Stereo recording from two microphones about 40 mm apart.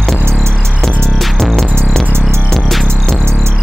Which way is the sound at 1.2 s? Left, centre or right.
Centre.